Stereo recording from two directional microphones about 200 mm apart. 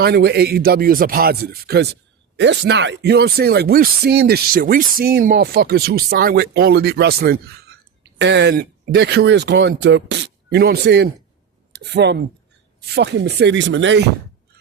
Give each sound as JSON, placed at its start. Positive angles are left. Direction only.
{"t": 0.0, "sound": "speech", "side_deg": -55}